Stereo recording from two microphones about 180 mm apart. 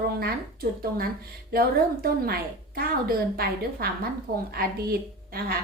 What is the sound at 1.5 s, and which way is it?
A woman's voice, 55° right (ahead or behind).